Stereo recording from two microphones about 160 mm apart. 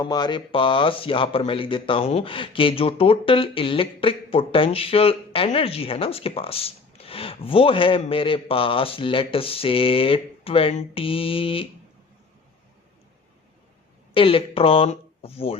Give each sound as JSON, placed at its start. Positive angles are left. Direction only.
{"t": 0.0, "sound": "speech", "side_deg": 25}
{"t": 14.1, "sound": "speech", "side_deg": 35}